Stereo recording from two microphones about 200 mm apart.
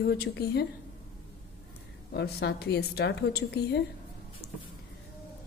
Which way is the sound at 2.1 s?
55° left (ahead or behind).